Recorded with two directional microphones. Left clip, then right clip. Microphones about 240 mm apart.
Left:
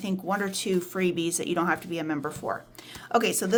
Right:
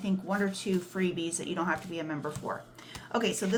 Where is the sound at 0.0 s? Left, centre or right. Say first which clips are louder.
Left 3 dB; left.